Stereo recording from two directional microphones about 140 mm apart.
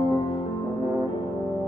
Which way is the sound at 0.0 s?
35° left (ahead or behind).